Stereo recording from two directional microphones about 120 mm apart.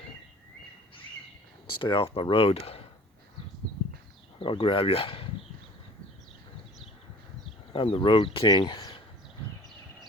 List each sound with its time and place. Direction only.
1.8 s speech: 45° left (ahead or behind)
4.4 s speech: 45° left (ahead or behind)
7.7 s speech: 50° left (ahead or behind)